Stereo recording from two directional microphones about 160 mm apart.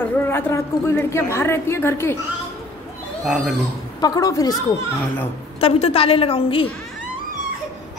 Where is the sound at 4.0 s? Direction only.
20° left (ahead or behind).